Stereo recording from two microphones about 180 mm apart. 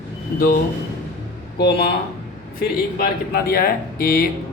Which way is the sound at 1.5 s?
65° left (ahead or behind).